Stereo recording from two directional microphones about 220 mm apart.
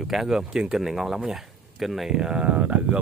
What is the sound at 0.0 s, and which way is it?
Speech, centre (ahead or behind).